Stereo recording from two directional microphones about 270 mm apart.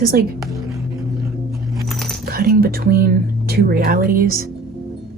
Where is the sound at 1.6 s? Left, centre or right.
Centre.